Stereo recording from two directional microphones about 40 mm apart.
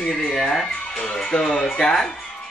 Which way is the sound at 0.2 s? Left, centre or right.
Centre.